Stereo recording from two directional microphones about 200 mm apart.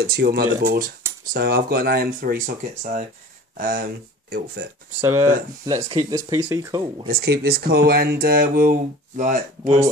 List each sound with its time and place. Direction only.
0.0 s speech: 50° right (ahead or behind)
4.9 s speech: 15° right (ahead or behind)
7.1 s speech: 50° right (ahead or behind)